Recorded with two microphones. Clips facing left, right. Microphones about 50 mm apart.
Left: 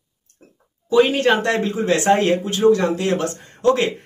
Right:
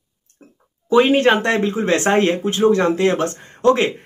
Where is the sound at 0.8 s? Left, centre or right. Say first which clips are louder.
Right 2 dB; right.